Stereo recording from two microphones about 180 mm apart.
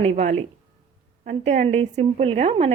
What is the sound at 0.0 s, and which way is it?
A woman's voice, 40° right (ahead or behind).